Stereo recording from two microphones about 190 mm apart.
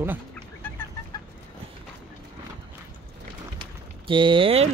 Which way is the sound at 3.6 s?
25° right (ahead or behind).